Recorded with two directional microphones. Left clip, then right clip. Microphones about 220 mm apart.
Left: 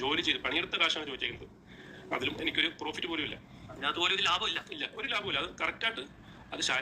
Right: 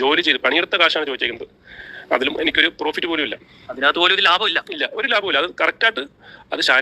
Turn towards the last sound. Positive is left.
turn(degrees=-40)  # may be behind; listen again after turning